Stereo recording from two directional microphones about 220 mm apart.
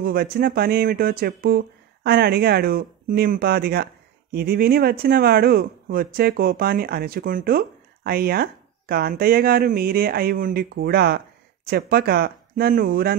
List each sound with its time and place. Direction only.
0.0 s speech: 45° right (ahead or behind)